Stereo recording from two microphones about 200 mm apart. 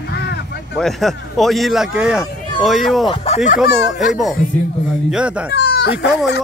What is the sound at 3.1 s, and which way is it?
Speech, 30° left (ahead or behind).